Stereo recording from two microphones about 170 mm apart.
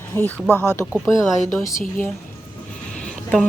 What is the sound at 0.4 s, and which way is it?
Speech, 10° right (ahead or behind).